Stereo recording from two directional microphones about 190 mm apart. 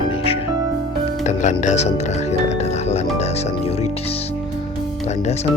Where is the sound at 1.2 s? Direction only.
40° left (ahead or behind).